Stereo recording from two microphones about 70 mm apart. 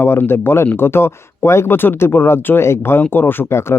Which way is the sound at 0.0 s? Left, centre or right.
Left.